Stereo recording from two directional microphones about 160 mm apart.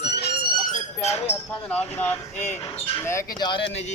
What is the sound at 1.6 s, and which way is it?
Speech, 10° left (ahead or behind).